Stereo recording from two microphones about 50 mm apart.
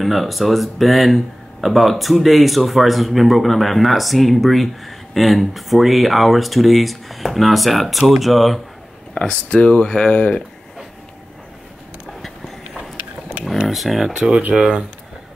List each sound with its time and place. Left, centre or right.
0.0 s speech: centre
9.1 s speech: centre
13.7 s speech: centre